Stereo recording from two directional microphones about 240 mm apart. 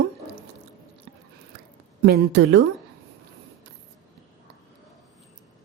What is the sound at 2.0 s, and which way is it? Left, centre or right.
Speech, right.